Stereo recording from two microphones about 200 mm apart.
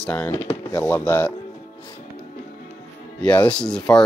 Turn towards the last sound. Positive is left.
turn(degrees=5)  # may be behind; listen again after turning